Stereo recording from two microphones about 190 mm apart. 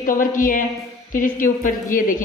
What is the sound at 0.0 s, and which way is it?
A woman's voice, 45° left (ahead or behind).